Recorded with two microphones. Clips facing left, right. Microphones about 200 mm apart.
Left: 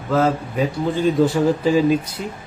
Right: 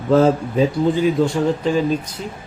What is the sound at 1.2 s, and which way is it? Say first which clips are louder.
Speech: left 1 dB; 5° left (ahead or behind).